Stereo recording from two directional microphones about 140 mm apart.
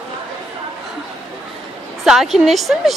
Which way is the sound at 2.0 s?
Centre (ahead or behind).